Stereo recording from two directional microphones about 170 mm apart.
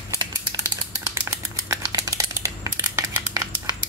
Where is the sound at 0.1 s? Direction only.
20° right (ahead or behind).